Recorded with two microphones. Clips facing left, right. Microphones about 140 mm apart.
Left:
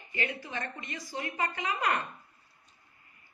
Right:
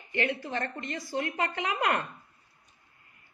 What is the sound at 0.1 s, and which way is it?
A woman's voice, 65° right (ahead or behind).